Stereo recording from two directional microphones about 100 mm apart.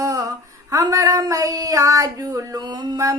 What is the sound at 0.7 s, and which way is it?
Child singing, 35° right (ahead or behind).